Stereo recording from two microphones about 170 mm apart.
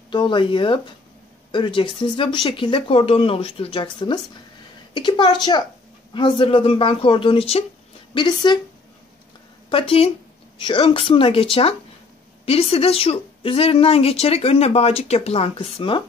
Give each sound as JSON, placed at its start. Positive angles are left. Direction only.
{"t": 0.1, "sound": "speech", "side_deg": 30}
{"t": 9.7, "sound": "speech", "side_deg": 30}
{"t": 12.4, "sound": "speech", "side_deg": 35}